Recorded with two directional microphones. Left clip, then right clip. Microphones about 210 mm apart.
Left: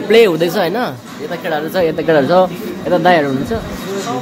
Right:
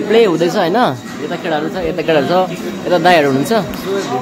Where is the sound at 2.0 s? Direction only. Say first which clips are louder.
Left 1 dB; 15° left (ahead or behind).